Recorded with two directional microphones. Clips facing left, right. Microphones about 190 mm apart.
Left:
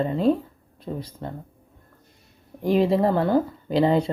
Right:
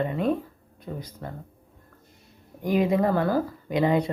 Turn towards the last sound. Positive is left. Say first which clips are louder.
# left 3 dB
turn(degrees=30)  # may be behind; listen again after turning